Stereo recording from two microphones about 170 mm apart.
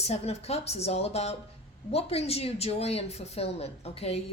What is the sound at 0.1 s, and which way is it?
Speech, 35° left (ahead or behind).